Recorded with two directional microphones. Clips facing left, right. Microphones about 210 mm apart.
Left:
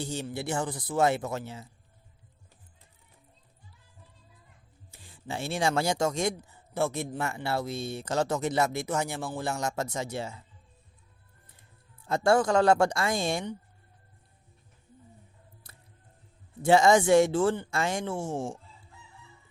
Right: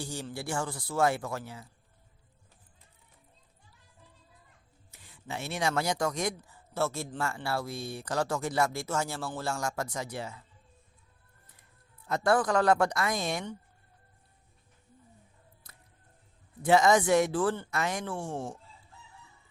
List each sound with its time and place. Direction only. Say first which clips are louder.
0.0 s speech: left 4 dB; 20° left (ahead or behind)
4.9 s speech: left 3 dB; 30° left (ahead or behind)
12.0 s speech: left 3 dB; 25° left (ahead or behind)
15.6 s a sound: left 1 dB; 30° left (ahead or behind)
16.6 s speech: left 2 dB; 30° left (ahead or behind)